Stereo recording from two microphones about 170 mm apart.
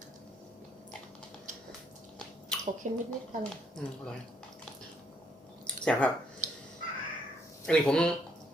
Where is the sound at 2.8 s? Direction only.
50° right (ahead or behind).